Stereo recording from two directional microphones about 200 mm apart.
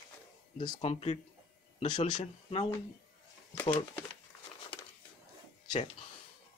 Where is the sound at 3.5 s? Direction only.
25° left (ahead or behind).